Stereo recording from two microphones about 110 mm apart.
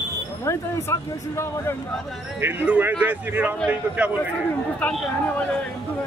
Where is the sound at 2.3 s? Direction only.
20° right (ahead or behind).